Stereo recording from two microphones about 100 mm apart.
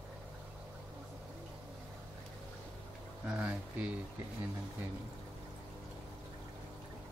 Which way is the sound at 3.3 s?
15° right (ahead or behind).